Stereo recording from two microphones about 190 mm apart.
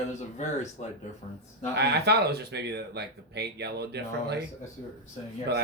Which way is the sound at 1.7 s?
60° right (ahead or behind).